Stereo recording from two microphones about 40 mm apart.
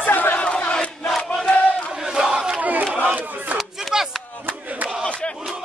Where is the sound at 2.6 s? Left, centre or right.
Right.